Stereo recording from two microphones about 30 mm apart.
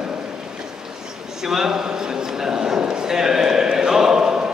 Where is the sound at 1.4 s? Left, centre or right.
Centre.